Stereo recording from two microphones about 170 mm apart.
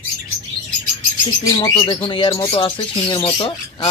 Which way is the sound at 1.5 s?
25° left (ahead or behind).